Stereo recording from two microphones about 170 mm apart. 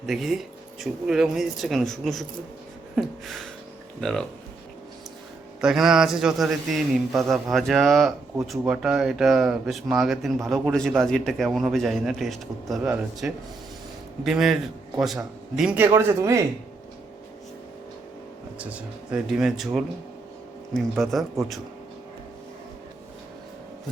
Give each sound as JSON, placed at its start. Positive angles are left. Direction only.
{"t": 0.0, "sound": "speech", "side_deg": 0}
{"t": 5.5, "sound": "speech", "side_deg": -5}
{"t": 18.6, "sound": "speech", "side_deg": -5}
{"t": 21.0, "sound": "speech", "side_deg": 0}